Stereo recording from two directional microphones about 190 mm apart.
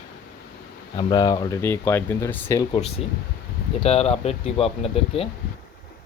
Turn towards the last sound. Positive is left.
turn(degrees=30)  # may be behind; listen again after turning